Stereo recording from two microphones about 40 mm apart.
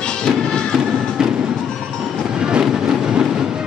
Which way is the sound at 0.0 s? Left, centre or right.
Centre.